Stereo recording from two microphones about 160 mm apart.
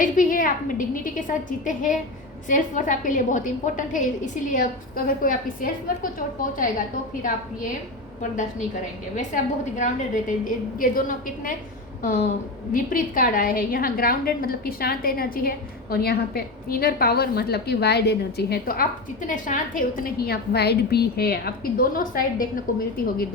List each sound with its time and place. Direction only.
0.0 s a woman's voice: 60° left (ahead or behind)
9.1 s a woman's voice: 55° left (ahead or behind)
12.7 s a woman's voice: 60° left (ahead or behind)